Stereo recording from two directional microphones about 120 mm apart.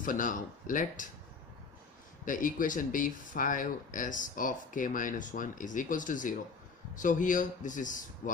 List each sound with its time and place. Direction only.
0.1 s speech: 90° left
2.2 s speech: 90° left